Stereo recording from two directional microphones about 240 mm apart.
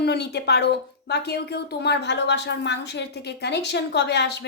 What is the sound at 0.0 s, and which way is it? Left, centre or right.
Speech, left.